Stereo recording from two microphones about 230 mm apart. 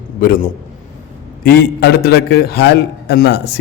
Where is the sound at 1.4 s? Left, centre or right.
Left.